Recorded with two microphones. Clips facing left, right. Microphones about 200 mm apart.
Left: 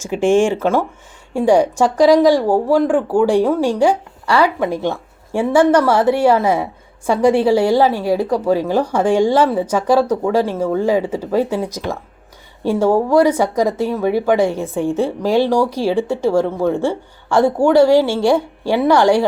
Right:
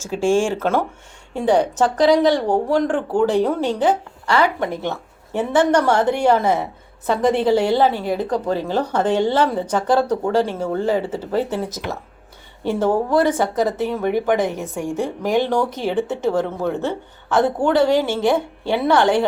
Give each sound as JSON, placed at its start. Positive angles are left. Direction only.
{"t": 0.0, "sound": "speech", "side_deg": 15}
{"t": 14.9, "sound": "a woman's voice", "side_deg": -15}
{"t": 15.8, "sound": "speech", "side_deg": 10}
{"t": 17.8, "sound": "a woman's voice", "side_deg": -20}
{"t": 18.7, "sound": "speech", "side_deg": 10}